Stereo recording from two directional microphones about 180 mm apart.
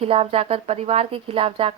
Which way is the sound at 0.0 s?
35° right (ahead or behind).